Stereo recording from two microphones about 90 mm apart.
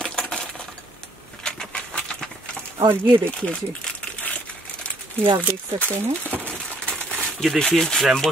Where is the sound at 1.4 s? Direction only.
10° left (ahead or behind).